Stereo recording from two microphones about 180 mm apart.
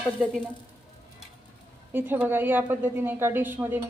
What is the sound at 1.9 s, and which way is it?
A woman's voice, 10° right (ahead or behind).